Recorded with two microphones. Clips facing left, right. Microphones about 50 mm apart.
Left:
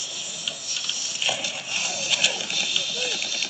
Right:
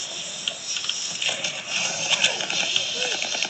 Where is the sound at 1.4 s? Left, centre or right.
Right.